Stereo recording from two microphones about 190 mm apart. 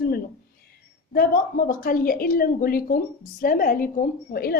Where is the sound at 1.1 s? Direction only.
50° left (ahead or behind).